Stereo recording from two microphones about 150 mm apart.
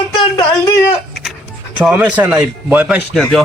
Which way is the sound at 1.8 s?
10° right (ahead or behind).